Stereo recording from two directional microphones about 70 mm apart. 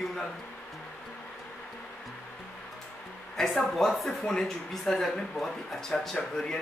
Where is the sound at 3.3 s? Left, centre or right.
Centre.